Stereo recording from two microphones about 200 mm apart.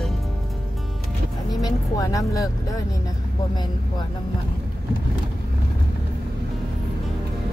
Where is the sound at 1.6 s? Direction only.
15° left (ahead or behind).